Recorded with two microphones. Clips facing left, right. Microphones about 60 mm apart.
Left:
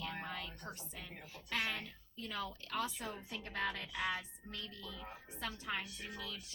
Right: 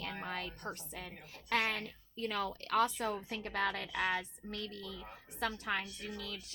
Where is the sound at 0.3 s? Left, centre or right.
Right.